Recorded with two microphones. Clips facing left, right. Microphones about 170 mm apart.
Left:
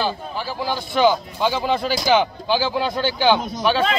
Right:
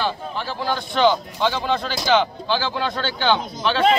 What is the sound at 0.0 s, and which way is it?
Speech, 5° left (ahead or behind).